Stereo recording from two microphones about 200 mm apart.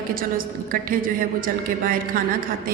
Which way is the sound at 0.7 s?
45° right (ahead or behind).